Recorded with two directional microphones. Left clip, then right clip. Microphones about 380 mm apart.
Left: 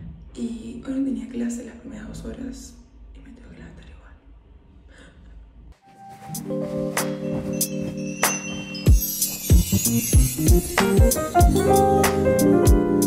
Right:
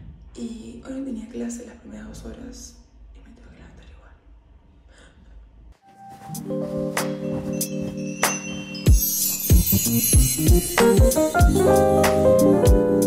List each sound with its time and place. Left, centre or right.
0.3 s a woman's voice: centre
6.3 s music: centre